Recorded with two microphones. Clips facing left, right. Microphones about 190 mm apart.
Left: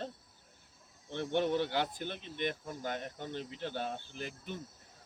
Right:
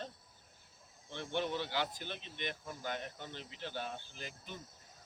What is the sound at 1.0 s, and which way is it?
Speech, 55° left (ahead or behind).